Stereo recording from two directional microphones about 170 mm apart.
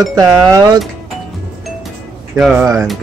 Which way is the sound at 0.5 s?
20° right (ahead or behind).